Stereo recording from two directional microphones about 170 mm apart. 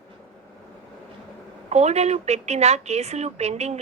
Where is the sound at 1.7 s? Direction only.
40° right (ahead or behind).